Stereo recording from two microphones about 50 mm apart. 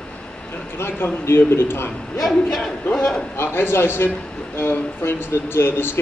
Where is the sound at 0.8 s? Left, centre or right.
Left.